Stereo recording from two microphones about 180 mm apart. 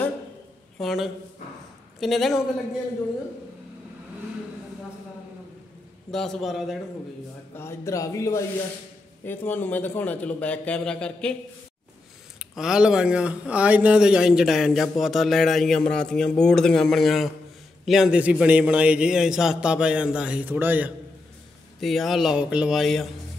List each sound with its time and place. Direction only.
0.7 s speech: centre (ahead or behind)
6.1 s speech: centre (ahead or behind)
7.5 s a man's voice: 15° left (ahead or behind)
12.4 s speech: 5° right (ahead or behind)
21.7 s speech: centre (ahead or behind)